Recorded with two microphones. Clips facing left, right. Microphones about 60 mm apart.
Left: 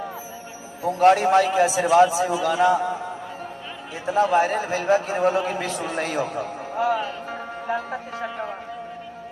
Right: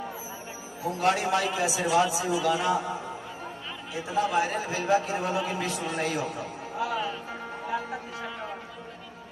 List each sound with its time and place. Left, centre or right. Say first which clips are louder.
0.8 s a man's voice: left 9 dB; left
3.9 s a man's voice: left 7 dB; left
6.9 s music: left 5 dB; left